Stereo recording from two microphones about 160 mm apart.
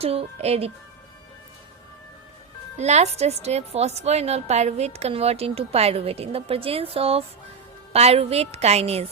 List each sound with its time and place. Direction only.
0.0 s a woman's voice: 40° right (ahead or behind)
2.7 s a woman's voice: 45° right (ahead or behind)